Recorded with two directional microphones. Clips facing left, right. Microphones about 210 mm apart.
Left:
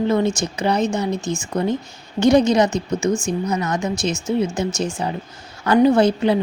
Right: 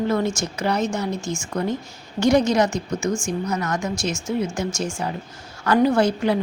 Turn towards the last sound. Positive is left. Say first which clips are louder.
# left 4 dB
turn(degrees=20)  # may be behind; listen again after turning